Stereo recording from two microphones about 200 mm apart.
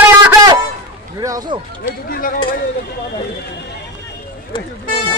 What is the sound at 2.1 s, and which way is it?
Speech, 45° left (ahead or behind).